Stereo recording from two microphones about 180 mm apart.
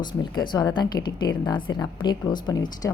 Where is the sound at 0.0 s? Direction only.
25° left (ahead or behind).